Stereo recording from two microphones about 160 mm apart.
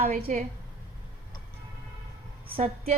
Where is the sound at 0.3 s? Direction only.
50° right (ahead or behind).